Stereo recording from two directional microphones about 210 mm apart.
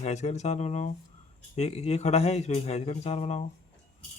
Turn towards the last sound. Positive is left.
turn(degrees=30)  # may be behind; listen again after turning